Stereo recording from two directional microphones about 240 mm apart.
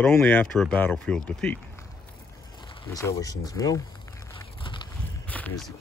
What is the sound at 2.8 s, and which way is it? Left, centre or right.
Speech, centre.